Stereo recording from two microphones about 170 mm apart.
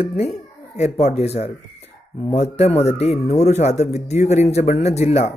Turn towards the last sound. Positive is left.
turn(degrees=40)  # may be behind; listen again after turning